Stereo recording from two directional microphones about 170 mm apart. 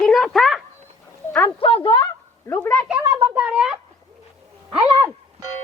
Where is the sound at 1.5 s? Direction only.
30° left (ahead or behind).